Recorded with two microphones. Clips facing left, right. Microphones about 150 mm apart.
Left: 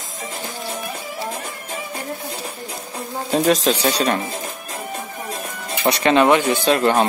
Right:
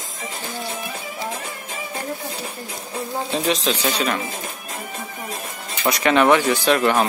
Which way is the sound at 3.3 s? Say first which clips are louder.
Left 6 dB; 45° left (ahead or behind).